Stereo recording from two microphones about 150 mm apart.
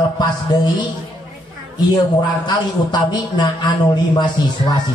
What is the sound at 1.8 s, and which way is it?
A man's voice, 30° left (ahead or behind).